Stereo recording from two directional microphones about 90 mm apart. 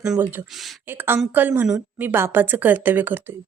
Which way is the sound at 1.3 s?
20° right (ahead or behind).